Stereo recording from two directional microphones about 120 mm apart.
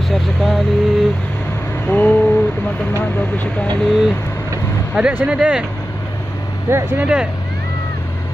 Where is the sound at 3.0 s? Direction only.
15° left (ahead or behind).